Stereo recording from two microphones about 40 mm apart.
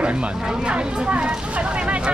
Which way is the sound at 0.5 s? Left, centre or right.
Right.